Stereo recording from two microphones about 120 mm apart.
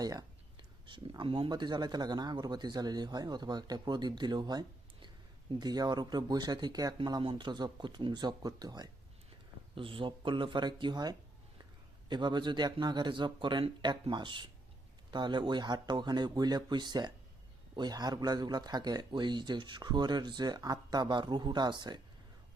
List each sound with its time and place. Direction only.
0.0 s speech: 35° right (ahead or behind)
9.7 s speech: 45° right (ahead or behind)